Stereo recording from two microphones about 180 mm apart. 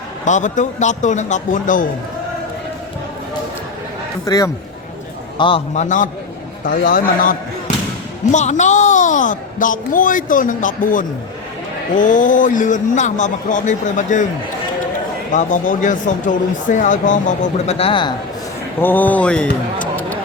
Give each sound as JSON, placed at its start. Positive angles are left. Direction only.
{"t": 0.3, "sound": "speech", "side_deg": 45}
{"t": 4.3, "sound": "speech", "side_deg": 20}
{"t": 5.4, "sound": "a man's voice", "side_deg": 30}
{"t": 6.7, "sound": "speech", "side_deg": 50}
{"t": 7.7, "sound": "basketball bounce", "side_deg": 45}
{"t": 8.3, "sound": "speech", "side_deg": 40}
{"t": 15.3, "sound": "speech", "side_deg": 45}
{"t": 17.7, "sound": "a man's voice", "side_deg": 30}
{"t": 18.8, "sound": "speech", "side_deg": 10}